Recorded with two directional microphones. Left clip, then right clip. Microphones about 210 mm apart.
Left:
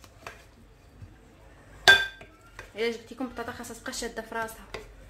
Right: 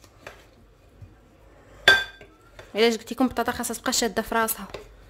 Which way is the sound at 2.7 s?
50° right (ahead or behind).